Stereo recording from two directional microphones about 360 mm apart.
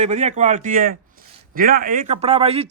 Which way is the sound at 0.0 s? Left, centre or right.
Centre.